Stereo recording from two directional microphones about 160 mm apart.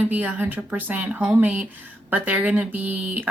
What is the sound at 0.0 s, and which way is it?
A woman's voice, 10° right (ahead or behind).